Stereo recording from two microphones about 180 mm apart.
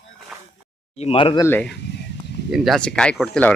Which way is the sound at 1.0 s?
30° left (ahead or behind).